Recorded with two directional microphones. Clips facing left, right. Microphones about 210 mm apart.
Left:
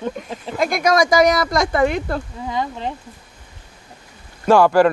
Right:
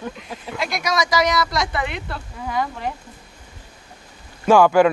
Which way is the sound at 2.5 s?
20° left (ahead or behind).